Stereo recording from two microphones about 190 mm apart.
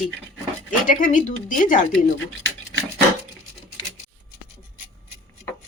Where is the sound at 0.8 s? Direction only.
45° left (ahead or behind).